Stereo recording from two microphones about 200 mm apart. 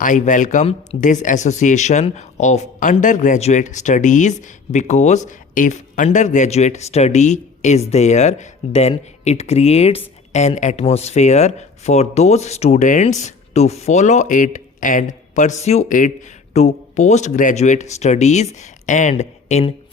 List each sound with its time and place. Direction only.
0.0 s speech: 40° left (ahead or behind)